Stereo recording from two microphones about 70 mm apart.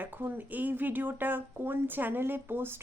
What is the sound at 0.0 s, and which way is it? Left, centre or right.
Speech, right.